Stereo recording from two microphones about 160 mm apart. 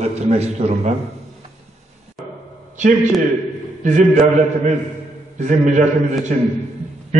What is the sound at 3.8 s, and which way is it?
A man's voice, 50° right (ahead or behind).